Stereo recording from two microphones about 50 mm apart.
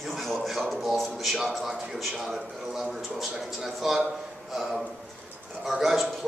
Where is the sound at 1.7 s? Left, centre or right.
Centre.